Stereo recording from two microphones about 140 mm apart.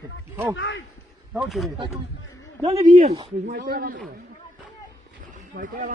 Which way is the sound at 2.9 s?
40° right (ahead or behind).